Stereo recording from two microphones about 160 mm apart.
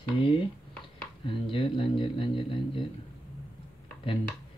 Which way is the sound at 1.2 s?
35° left (ahead or behind).